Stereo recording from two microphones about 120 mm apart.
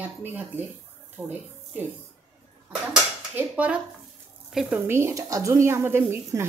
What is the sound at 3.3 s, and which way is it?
Speech, 10° right (ahead or behind).